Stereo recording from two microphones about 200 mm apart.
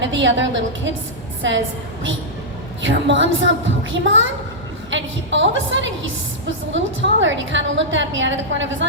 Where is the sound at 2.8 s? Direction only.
65° right (ahead or behind).